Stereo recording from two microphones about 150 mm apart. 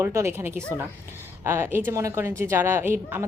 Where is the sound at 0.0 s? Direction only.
15° right (ahead or behind).